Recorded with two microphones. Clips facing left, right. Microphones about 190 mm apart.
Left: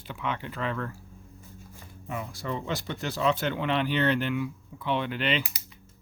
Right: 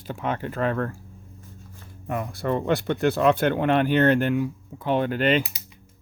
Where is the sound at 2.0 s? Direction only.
55° right (ahead or behind).